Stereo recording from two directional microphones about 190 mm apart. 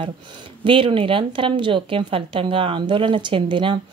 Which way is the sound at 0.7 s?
25° right (ahead or behind).